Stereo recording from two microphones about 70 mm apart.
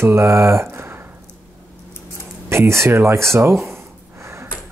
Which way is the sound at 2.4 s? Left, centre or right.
Right.